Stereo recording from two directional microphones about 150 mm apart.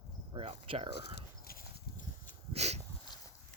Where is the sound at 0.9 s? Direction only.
90° left.